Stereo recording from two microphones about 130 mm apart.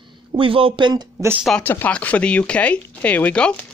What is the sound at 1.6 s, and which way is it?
Speech, 15° left (ahead or behind).